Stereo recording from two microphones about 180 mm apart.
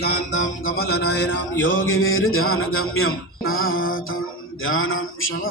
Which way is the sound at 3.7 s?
90° left.